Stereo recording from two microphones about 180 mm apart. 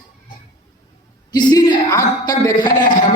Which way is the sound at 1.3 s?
25° left (ahead or behind).